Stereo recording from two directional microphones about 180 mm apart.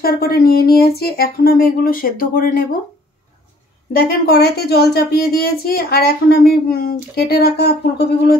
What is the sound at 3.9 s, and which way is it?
A woman's voice, 60° left (ahead or behind).